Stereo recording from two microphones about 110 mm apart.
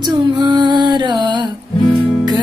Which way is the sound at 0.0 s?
40° right (ahead or behind).